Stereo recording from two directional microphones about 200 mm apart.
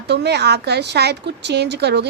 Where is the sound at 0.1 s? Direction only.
55° right (ahead or behind).